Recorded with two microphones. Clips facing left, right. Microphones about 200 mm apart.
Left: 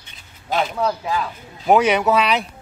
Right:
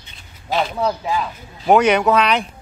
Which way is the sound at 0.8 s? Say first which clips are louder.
Right 1 dB; 15° right (ahead or behind).